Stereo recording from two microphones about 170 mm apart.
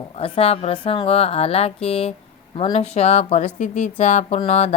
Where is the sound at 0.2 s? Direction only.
35° left (ahead or behind).